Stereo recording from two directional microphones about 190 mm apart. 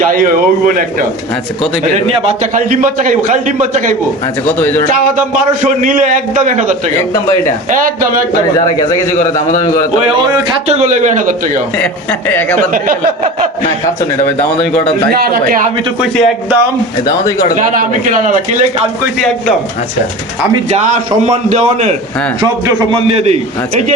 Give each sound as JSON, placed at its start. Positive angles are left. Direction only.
{"t": 0.0, "sound": "a man's voice", "side_deg": -45}
{"t": 4.4, "sound": "a man's voice", "side_deg": 10}
{"t": 4.9, "sound": "a man's voice", "side_deg": -45}
{"t": 7.7, "sound": "a man's voice", "side_deg": -45}
{"t": 8.8, "sound": "a man's voice", "side_deg": 15}
{"t": 10.1, "sound": "a man's voice", "side_deg": -25}
{"t": 10.8, "sound": "a man's voice", "side_deg": -40}
{"t": 12.3, "sound": "a man's voice", "side_deg": 10}
{"t": 12.5, "sound": "a man's voice", "side_deg": -45}
{"t": 15.1, "sound": "a man's voice", "side_deg": -50}
{"t": 16.0, "sound": "a man's voice", "side_deg": -5}
{"t": 17.5, "sound": "a man's voice", "side_deg": -45}
{"t": 21.2, "sound": "a man's voice", "side_deg": -35}